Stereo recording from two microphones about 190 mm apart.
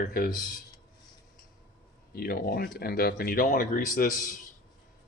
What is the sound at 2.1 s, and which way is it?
Speech, 55° left (ahead or behind).